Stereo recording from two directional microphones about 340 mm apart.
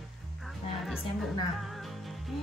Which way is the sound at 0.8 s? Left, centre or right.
Centre.